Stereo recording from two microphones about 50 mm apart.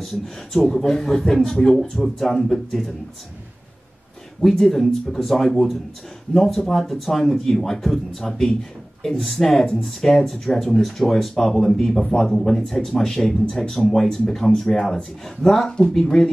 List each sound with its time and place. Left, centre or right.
0.0 s speech: centre
4.4 s speech: centre
15.2 s speech: centre